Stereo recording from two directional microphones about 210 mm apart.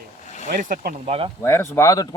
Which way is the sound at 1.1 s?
25° right (ahead or behind).